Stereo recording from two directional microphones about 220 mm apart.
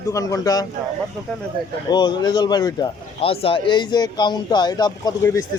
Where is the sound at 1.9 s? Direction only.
20° left (ahead or behind).